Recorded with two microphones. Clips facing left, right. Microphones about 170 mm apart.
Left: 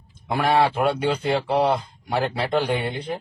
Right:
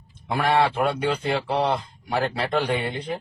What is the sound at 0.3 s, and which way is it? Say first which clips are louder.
Speech: left 1 dB; centre (ahead or behind).